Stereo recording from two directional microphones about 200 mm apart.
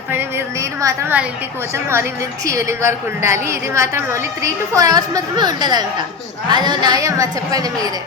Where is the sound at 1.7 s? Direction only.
15° right (ahead or behind).